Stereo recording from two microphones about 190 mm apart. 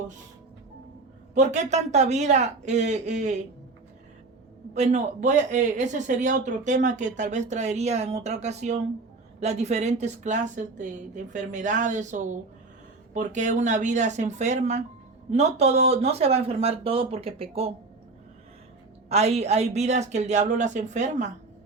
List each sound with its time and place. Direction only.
1.3 s speech: 40° right (ahead or behind)
4.7 s speech: 35° right (ahead or behind)
19.0 s speech: 35° right (ahead or behind)